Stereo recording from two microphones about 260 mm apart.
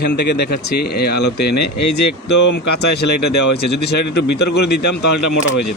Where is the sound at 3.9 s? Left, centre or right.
Left.